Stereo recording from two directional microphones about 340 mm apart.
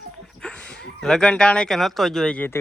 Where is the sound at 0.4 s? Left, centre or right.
Centre.